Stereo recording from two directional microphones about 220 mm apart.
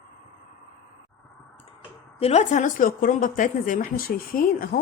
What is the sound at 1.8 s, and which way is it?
Speech, 30° left (ahead or behind).